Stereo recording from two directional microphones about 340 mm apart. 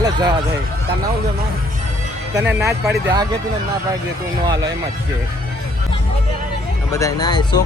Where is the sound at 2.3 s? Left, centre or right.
Centre.